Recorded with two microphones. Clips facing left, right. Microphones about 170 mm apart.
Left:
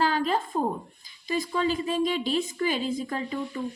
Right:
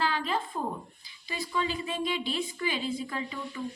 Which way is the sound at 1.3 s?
45° left (ahead or behind).